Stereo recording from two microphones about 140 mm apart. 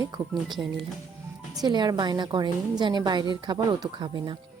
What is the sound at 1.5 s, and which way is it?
A woman's voice, 30° right (ahead or behind).